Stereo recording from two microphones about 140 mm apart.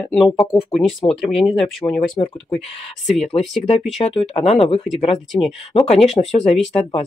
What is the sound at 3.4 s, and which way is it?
Speech, 50° left (ahead or behind).